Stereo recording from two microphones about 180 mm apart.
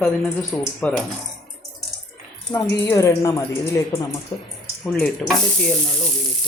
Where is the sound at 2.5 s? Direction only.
15° left (ahead or behind).